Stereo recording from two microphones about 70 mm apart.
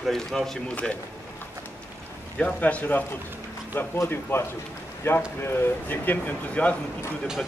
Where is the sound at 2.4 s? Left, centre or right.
Centre.